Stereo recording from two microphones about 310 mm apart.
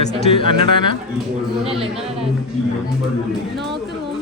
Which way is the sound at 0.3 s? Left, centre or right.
Centre.